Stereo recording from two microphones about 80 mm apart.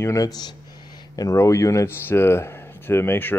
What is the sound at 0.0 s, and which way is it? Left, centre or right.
Speech, left.